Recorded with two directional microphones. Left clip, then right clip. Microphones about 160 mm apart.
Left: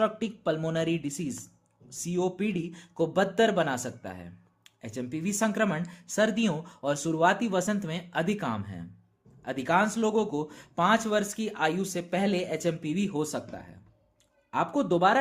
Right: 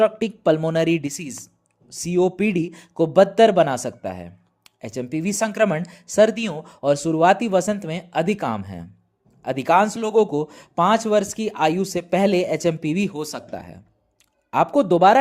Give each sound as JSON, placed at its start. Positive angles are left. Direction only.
{"t": 0.0, "sound": "speech", "side_deg": -40}